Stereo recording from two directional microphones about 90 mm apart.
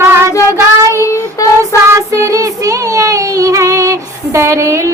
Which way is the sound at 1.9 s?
35° right (ahead or behind).